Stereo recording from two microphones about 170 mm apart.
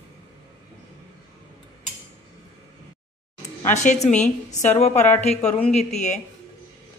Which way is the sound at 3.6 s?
45° left (ahead or behind).